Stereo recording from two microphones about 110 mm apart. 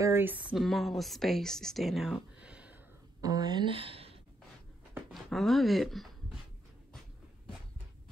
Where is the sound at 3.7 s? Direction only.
55° right (ahead or behind).